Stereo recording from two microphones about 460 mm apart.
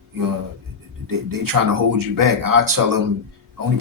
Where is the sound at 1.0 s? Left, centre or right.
Right.